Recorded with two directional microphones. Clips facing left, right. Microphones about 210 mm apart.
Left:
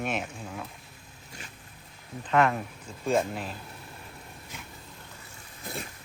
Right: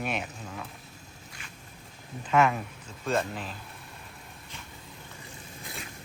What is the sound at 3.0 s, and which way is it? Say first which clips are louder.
Speech: left 3 dB; 10° left (ahead or behind).